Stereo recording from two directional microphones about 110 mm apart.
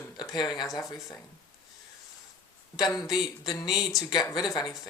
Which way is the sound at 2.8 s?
35° left (ahead or behind).